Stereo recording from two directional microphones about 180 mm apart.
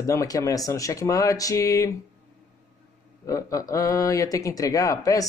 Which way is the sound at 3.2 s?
20° left (ahead or behind).